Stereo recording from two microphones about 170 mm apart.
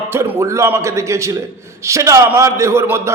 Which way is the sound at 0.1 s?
15° right (ahead or behind).